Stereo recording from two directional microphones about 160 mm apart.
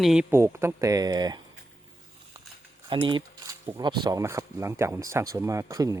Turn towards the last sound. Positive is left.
turn(degrees=-20)  # may be behind; listen again after turning